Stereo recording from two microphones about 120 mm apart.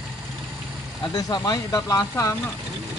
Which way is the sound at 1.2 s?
30° left (ahead or behind).